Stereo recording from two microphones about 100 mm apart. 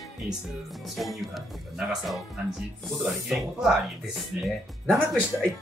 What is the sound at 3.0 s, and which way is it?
Speech, 5° right (ahead or behind).